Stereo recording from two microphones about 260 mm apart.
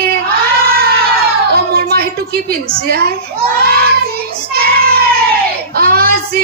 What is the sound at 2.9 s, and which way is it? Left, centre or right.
Speech, right.